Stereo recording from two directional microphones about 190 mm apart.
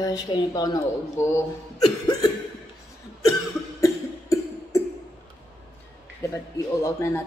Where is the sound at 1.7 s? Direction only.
20° left (ahead or behind).